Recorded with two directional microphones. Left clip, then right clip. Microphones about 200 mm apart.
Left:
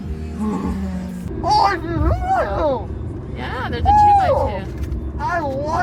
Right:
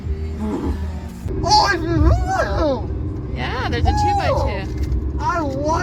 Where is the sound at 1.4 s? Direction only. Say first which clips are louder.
Right 1 dB; 20° right (ahead or behind).